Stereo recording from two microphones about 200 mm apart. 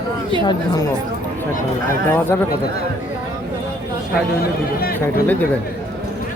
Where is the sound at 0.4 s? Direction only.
20° left (ahead or behind).